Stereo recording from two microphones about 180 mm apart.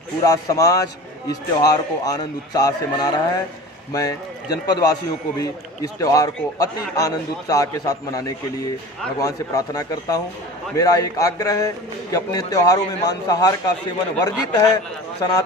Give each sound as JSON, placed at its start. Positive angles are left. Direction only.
{"t": 0.2, "sound": "a man's voice", "side_deg": 20}